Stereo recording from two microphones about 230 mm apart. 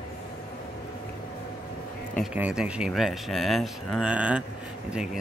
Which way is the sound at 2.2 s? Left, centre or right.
Centre.